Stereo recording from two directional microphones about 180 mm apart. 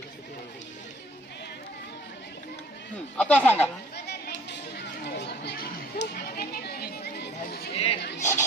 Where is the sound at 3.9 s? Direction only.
65° left (ahead or behind).